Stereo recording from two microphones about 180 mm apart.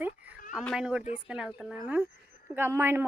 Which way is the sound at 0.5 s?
Centre (ahead or behind).